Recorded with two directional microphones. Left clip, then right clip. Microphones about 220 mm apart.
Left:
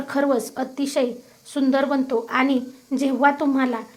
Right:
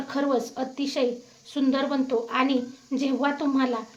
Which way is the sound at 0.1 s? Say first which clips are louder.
Left 4 dB; 25° left (ahead or behind).